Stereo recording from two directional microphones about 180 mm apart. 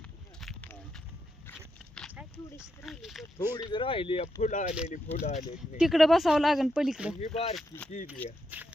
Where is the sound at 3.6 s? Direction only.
30° left (ahead or behind).